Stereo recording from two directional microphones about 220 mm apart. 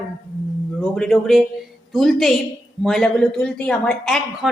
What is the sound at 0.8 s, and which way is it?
A woman's voice, 5° left (ahead or behind).